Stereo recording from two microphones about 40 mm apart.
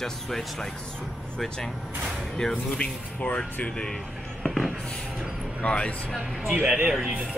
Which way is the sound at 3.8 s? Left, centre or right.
Centre.